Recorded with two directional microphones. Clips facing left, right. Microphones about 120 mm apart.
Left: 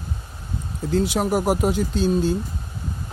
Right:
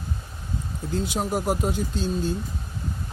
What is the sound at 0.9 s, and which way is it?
Speech, 90° left.